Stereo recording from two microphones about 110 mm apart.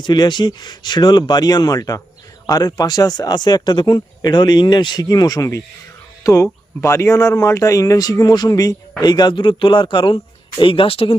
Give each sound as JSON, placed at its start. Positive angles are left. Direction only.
{"t": 0.0, "sound": "speech", "side_deg": 40}